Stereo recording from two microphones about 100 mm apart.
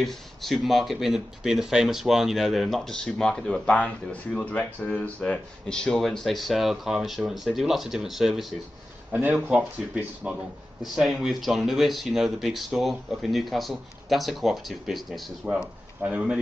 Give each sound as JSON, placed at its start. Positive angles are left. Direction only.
{"t": 0.0, "sound": "speech", "side_deg": 0}
{"t": 9.1, "sound": "speech", "side_deg": -15}